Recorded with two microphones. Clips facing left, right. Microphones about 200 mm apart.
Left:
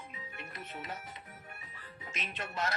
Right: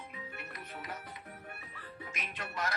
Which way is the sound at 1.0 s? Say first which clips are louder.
Right 2 dB; 60° right (ahead or behind).